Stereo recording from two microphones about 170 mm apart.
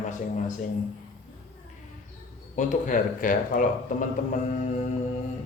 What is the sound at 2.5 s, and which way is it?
Speech, 45° left (ahead or behind).